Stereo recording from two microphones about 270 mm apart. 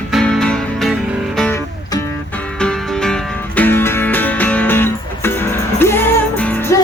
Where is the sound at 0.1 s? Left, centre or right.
Centre.